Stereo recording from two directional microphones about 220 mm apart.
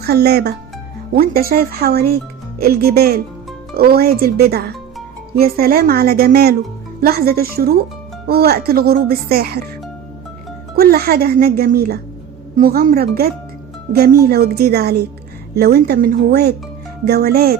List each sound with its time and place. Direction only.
0.0 s speech: 45° right (ahead or behind)
10.8 s speech: 45° right (ahead or behind)